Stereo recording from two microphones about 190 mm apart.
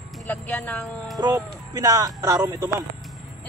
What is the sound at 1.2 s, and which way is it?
Speech, 20° right (ahead or behind).